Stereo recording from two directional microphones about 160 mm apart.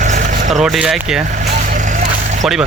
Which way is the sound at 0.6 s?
Centre (ahead or behind).